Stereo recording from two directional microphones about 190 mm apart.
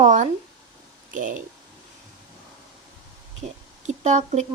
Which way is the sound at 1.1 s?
45° right (ahead or behind).